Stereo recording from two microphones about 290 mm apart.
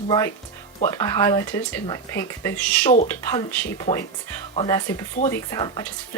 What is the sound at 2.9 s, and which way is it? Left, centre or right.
Speech, left.